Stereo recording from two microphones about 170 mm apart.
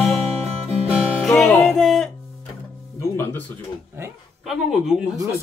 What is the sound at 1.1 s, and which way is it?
Music, centre (ahead or behind).